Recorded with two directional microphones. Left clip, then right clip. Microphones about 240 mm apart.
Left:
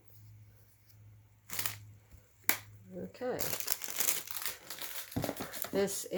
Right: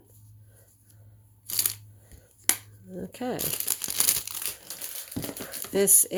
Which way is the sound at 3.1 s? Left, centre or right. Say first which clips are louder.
Right 4 dB; right.